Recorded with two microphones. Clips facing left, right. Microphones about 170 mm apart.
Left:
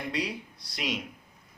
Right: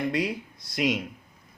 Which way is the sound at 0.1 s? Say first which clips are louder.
Right 5 dB; 50° right (ahead or behind).